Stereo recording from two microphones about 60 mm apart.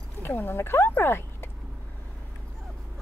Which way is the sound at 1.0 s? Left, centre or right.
Left.